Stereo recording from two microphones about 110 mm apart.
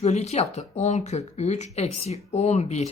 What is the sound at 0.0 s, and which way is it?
Speech, 85° left.